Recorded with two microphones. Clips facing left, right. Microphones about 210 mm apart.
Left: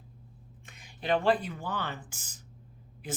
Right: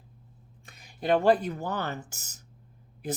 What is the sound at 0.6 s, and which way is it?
Speech, 40° right (ahead or behind).